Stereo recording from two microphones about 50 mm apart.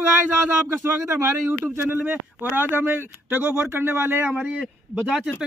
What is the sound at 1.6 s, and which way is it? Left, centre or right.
Speech, right.